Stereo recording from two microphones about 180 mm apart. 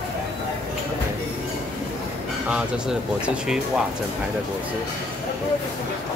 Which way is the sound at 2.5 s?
5° right (ahead or behind).